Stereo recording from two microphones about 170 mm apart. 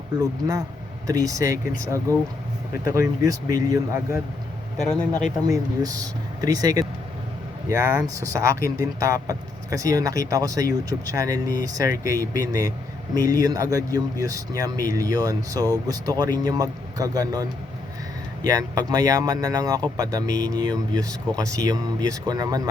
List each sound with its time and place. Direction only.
0.2 s speech: 20° right (ahead or behind)
4.9 s speech: 10° left (ahead or behind)
5.5 s speech: 20° right (ahead or behind)